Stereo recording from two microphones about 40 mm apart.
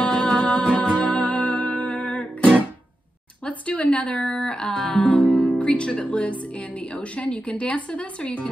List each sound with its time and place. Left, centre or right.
0.0 s music: left
3.4 s a woman's voice: left
5.8 s a woman's voice: left